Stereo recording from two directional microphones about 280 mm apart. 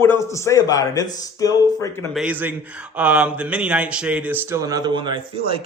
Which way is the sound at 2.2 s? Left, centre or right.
Centre.